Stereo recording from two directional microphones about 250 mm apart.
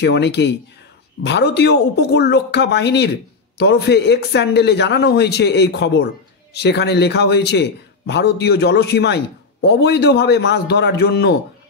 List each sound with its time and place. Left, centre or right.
0.0 s a man's voice: left